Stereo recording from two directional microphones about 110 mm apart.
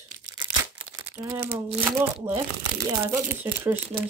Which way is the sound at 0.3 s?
45° right (ahead or behind).